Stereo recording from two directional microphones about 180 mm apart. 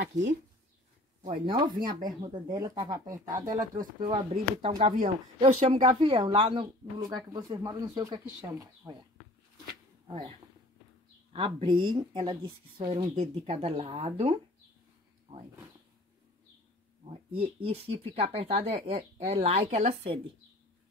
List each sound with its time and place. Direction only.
1.2 s speech: 30° right (ahead or behind)
4.3 s speech: 35° right (ahead or behind)
11.3 s speech: 25° right (ahead or behind)
17.0 s speech: 30° right (ahead or behind)